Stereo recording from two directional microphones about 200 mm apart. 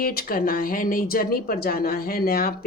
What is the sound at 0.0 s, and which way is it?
Speech, 45° left (ahead or behind).